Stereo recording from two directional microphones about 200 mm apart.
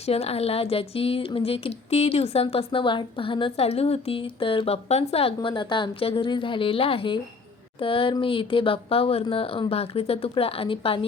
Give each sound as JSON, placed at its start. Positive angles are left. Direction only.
{"t": 0.0, "sound": "speech", "side_deg": 30}